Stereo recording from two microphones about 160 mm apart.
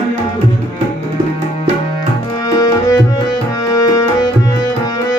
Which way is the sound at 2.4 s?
20° left (ahead or behind).